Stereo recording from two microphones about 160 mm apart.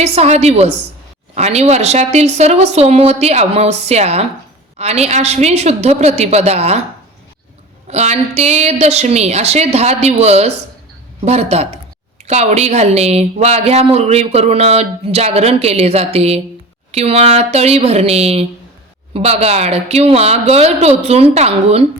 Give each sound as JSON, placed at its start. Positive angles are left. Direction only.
{"t": 0.0, "sound": "a woman's voice", "side_deg": -40}
{"t": 7.9, "sound": "a woman's voice", "side_deg": -45}